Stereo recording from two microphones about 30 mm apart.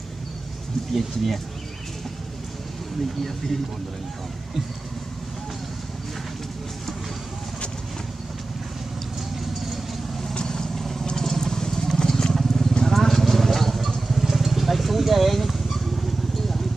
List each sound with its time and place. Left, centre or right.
0.9 s speech: centre
10.3 s vehicle: left
10.7 s vehicle: centre